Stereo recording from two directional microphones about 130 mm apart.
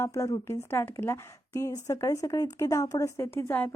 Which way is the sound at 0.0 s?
25° left (ahead or behind).